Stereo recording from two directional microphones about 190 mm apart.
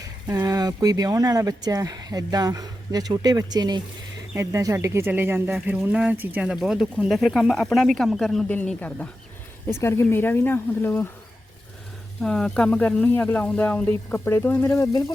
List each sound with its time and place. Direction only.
0.3 s speech: 20° right (ahead or behind); by 11.1 s 10° left (ahead or behind)
12.2 s speech: 5° left (ahead or behind)